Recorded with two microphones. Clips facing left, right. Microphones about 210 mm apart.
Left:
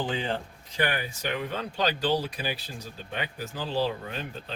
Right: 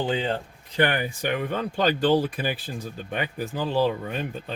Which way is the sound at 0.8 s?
55° right (ahead or behind).